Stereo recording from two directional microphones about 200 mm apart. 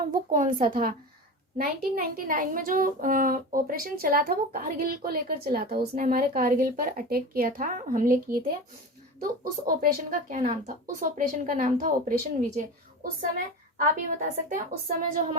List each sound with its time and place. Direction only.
0.0 s a woman's voice: 45° right (ahead or behind)